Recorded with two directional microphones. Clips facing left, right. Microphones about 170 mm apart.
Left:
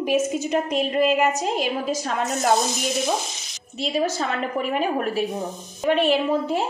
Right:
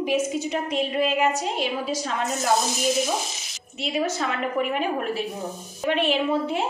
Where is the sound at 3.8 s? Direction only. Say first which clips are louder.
Left 2 dB; 35° left (ahead or behind).